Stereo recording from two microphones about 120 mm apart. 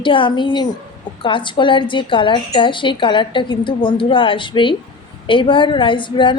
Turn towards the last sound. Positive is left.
turn(degrees=40)  # may be behind; listen again after turning